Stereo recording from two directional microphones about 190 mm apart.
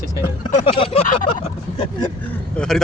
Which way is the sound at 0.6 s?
30° left (ahead or behind).